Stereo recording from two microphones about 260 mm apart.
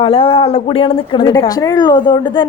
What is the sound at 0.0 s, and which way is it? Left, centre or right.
A woman's voice, left.